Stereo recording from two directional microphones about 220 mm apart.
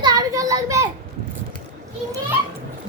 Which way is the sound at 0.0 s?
15° right (ahead or behind).